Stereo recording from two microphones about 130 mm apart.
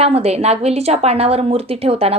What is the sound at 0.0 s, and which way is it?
Speech, 55° right (ahead or behind).